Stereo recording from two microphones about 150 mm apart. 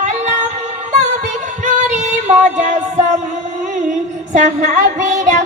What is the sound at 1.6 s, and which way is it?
Female singing, 50° right (ahead or behind).